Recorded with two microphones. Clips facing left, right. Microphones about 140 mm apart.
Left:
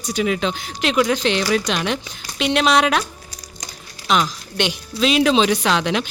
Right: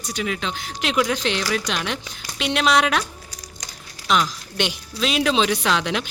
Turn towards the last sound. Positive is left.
turn(degrees=0)  # may be behind; listen again after turning